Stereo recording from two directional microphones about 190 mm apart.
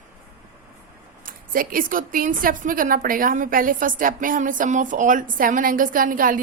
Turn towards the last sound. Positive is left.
turn(degrees=-45)  # may be behind; listen again after turning